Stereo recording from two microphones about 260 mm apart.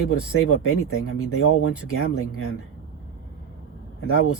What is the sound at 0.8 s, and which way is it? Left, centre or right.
Speech, left.